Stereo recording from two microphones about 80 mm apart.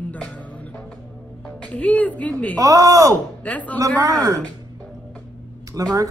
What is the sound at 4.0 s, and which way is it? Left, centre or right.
Speech, right.